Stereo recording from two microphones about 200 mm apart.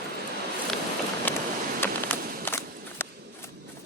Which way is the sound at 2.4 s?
10° left (ahead or behind).